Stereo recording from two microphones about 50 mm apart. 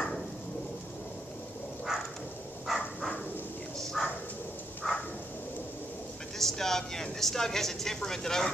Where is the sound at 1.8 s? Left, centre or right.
Centre.